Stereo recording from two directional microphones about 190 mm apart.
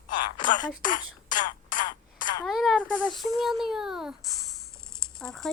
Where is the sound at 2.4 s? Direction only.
Centre (ahead or behind).